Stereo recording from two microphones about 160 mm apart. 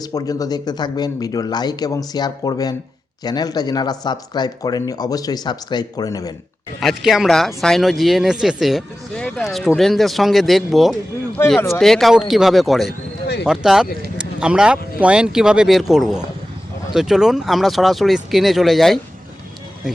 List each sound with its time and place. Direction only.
0.0 s speech: 25° left (ahead or behind)
6.7 s speech: centre (ahead or behind)